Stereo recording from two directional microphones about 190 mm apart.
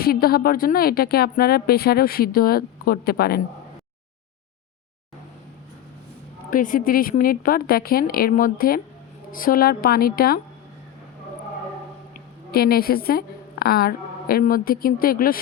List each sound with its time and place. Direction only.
0.0 s a woman's voice: 55° left (ahead or behind)
6.5 s a woman's voice: 45° left (ahead or behind)
12.5 s a woman's voice: 55° left (ahead or behind)